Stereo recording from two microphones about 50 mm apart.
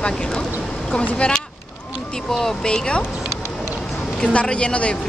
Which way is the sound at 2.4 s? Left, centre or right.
Centre.